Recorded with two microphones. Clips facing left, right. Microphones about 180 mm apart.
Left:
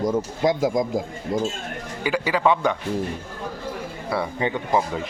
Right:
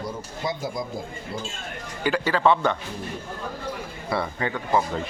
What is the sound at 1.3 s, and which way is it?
Speech, 45° left (ahead or behind).